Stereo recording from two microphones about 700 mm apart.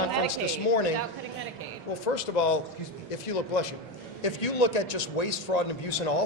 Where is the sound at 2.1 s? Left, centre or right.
Left.